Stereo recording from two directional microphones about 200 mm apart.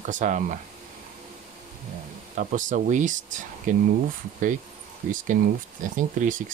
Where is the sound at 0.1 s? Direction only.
40° right (ahead or behind).